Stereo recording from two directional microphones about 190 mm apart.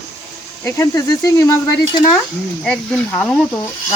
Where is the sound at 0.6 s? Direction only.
15° left (ahead or behind).